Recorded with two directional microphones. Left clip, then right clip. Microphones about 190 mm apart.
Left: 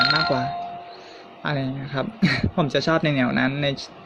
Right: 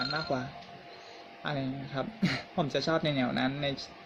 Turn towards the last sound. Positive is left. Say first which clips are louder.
# left 9 dB
turn(degrees=30)  # may be behind; listen again after turning